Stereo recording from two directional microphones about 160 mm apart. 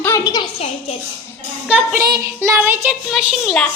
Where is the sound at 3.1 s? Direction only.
Centre (ahead or behind).